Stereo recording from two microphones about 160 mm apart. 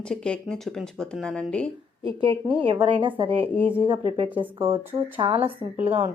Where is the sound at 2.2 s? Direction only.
35° right (ahead or behind).